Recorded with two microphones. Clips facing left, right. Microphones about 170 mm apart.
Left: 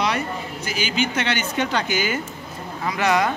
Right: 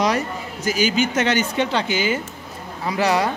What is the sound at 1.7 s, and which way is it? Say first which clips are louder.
Speech: right 2 dB; 25° right (ahead or behind).